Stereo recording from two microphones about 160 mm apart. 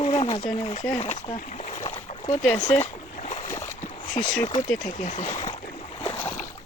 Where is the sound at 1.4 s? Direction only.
50° left (ahead or behind).